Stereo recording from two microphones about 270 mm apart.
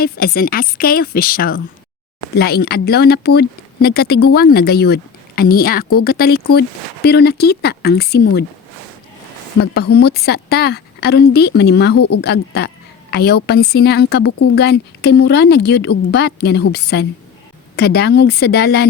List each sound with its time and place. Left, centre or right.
0.0 s speech: left
9.7 s speech: left
11.9 s speech: left
12.2 s speech: left